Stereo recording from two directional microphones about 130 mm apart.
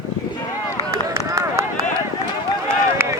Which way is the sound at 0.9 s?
25° right (ahead or behind).